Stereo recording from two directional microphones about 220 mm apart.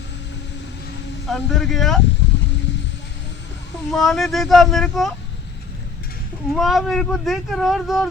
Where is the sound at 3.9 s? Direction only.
Centre (ahead or behind).